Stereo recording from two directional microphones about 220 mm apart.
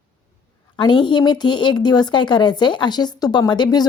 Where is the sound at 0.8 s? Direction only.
20° left (ahead or behind).